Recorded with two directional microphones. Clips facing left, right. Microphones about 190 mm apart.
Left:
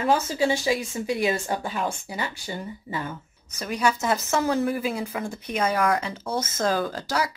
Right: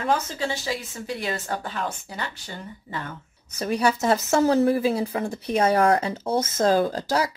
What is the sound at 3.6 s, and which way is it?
A woman's voice, 30° right (ahead or behind).